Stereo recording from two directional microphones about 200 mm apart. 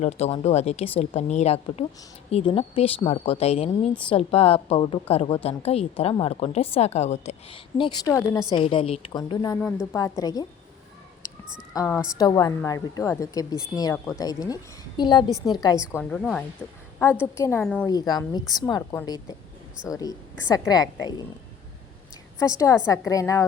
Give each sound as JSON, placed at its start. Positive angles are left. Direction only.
{"t": 0.0, "sound": "a woman's voice", "side_deg": 30}
{"t": 7.8, "sound": "a woman's voice", "side_deg": 20}
{"t": 9.6, "sound": "a woman's voice", "side_deg": 0}
{"t": 9.9, "sound": "a woman's voice", "side_deg": 15}
{"t": 11.7, "sound": "a woman's voice", "side_deg": 15}
{"t": 17.6, "sound": "a woman's voice", "side_deg": 5}
{"t": 17.8, "sound": "a woman's voice", "side_deg": 20}
{"t": 22.4, "sound": "a woman's voice", "side_deg": 15}